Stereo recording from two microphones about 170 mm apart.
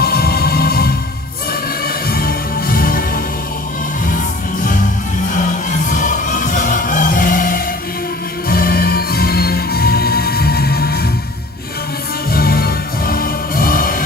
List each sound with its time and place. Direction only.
0.0 s music: 65° left (ahead or behind)
5.4 s music: 50° left (ahead or behind); by 11.0 s 65° left (ahead or behind)
12.3 s music: 60° left (ahead or behind)